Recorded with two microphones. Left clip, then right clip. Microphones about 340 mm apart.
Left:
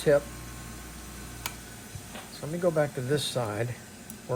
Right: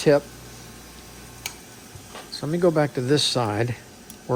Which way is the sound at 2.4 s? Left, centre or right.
Right.